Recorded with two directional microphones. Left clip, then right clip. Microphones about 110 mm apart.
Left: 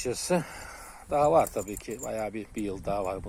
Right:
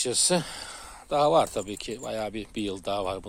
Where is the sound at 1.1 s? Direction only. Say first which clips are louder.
Right 1 dB; 20° right (ahead or behind).